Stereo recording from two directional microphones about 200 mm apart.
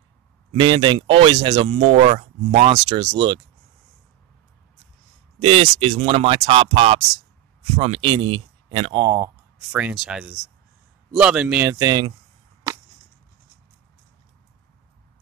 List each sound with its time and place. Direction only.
0.5 s speech: 25° right (ahead or behind)
2.7 s speech: 20° right (ahead or behind)
5.4 s a man's voice: 30° right (ahead or behind)